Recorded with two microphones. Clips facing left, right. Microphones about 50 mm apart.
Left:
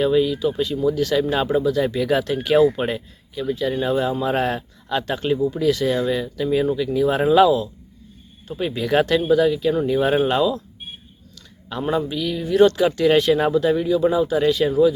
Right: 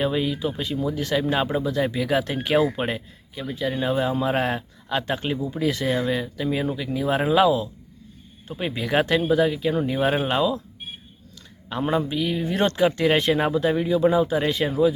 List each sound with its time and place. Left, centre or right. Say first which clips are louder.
0.0 s speech: left 6 dB; right
2.2 s speech: left 5 dB; right
11.7 s speech: left 1 dB; right